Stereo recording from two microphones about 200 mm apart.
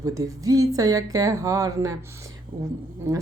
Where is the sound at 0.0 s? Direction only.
15° right (ahead or behind).